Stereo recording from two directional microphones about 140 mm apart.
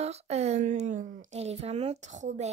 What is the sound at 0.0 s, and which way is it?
Speech, 50° right (ahead or behind).